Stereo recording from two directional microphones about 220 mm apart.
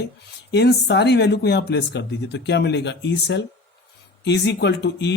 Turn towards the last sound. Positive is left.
turn(degrees=50)  # may be behind; listen again after turning